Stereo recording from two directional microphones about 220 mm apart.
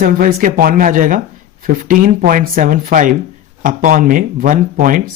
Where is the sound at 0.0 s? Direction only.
40° right (ahead or behind).